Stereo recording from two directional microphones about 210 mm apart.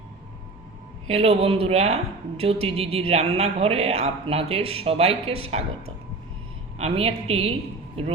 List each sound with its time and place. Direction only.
1.0 s a man's voice: 30° right (ahead or behind)
6.7 s a man's voice: 30° right (ahead or behind)